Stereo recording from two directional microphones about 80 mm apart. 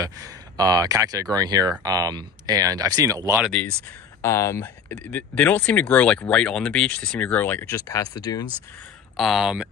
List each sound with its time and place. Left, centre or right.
0.0 s speech: right
3.6 s speech: centre
4.2 s speech: left
4.8 s speech: left
7.7 s speech: left
9.1 s speech: centre